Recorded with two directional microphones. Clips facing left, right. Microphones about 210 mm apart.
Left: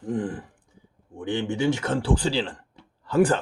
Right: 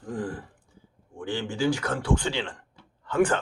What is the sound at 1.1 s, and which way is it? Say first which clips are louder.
Speech: left 4 dB; 20° left (ahead or behind).